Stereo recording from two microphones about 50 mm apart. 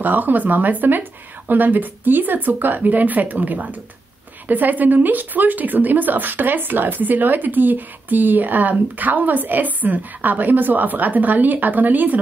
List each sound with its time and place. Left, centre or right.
0.0 s speech: right